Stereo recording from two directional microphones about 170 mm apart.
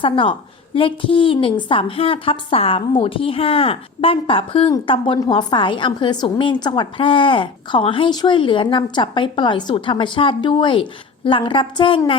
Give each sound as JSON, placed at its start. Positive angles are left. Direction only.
{"t": 0.0, "sound": "a woman's voice", "side_deg": 30}